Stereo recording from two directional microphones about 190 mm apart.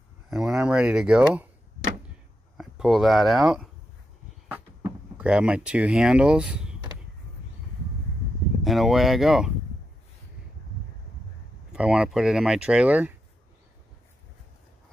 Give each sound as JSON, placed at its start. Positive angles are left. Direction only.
{"t": 0.3, "sound": "speech", "side_deg": 0}
{"t": 2.5, "sound": "speech", "side_deg": 0}
{"t": 5.1, "sound": "speech", "side_deg": -5}
{"t": 8.6, "sound": "speech", "side_deg": 0}
{"t": 11.7, "sound": "speech", "side_deg": -5}